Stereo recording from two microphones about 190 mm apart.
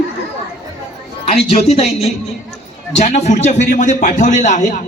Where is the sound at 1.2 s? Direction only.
35° left (ahead or behind).